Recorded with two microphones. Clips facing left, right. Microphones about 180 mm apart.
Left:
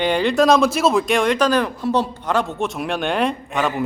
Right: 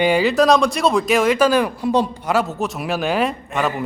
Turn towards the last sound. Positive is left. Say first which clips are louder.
# even
turn(degrees=0)  # may be behind; listen again after turning